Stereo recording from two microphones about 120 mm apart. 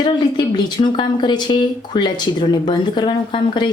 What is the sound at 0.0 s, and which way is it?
Speech, 40° left (ahead or behind).